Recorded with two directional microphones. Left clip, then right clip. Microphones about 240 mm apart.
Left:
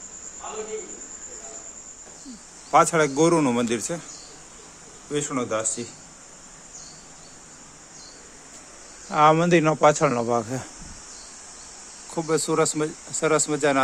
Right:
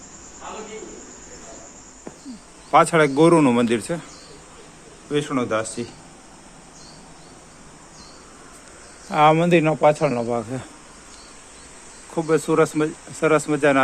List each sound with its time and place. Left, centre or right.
2.7 s speech: centre
5.1 s speech: centre
9.0 s speech: centre
12.1 s speech: centre